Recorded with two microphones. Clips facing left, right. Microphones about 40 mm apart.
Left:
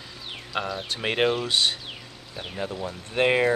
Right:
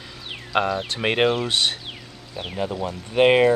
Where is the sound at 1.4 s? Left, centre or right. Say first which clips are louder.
Right 2 dB; right.